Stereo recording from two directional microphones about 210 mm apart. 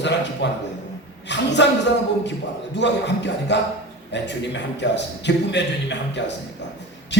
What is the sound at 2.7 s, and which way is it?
A man's voice, 55° left (ahead or behind).